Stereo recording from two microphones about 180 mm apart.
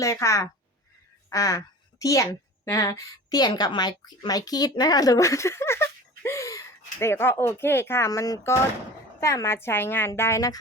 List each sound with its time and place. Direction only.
0.0 s a woman's voice: 15° left (ahead or behind)